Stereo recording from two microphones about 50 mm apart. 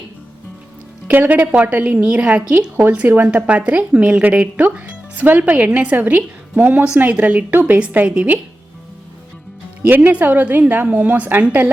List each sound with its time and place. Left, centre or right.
1.1 s a woman's voice: right; by 8.3 s centre
9.8 s a woman's voice: right